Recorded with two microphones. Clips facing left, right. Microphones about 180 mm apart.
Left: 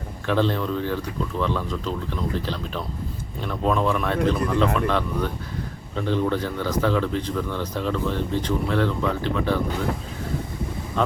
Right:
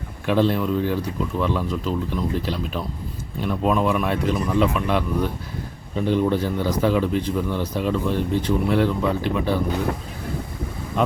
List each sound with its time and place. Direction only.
0.3 s a man's voice: 10° right (ahead or behind)
11.0 s a man's voice: 15° right (ahead or behind)